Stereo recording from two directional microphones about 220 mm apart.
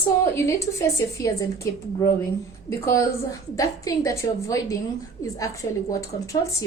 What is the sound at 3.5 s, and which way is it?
A woman's voice, 15° left (ahead or behind).